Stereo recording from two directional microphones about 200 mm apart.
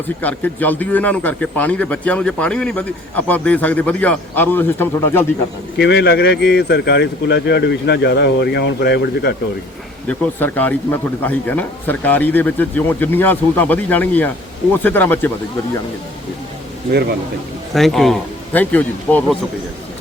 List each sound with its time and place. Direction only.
0.2 s speech: 10° left (ahead or behind)
5.7 s speech: 60° left (ahead or behind)
10.1 s speech: 10° left (ahead or behind)
17.7 s a man's voice: centre (ahead or behind)